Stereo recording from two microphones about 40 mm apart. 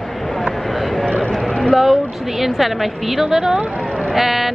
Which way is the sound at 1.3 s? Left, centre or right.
Centre.